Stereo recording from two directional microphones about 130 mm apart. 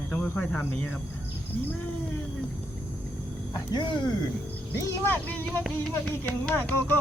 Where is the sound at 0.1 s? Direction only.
10° left (ahead or behind).